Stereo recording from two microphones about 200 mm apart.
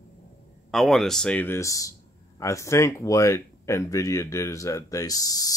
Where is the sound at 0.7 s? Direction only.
Centre (ahead or behind).